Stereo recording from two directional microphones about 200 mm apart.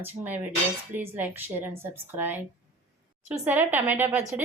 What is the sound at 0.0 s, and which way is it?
A woman's voice, 10° right (ahead or behind).